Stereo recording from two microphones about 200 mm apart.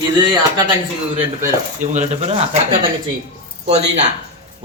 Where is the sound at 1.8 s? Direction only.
35° right (ahead or behind).